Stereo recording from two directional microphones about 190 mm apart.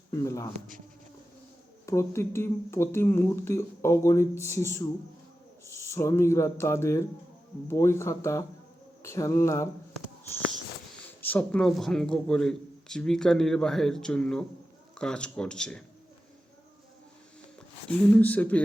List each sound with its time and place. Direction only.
0.1 s speech: 15° left (ahead or behind)
1.9 s speech: 15° left (ahead or behind)
11.2 s speech: 10° left (ahead or behind)
18.2 s speech: 10° left (ahead or behind)